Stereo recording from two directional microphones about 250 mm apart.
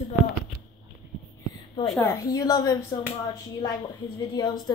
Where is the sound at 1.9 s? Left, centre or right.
Centre.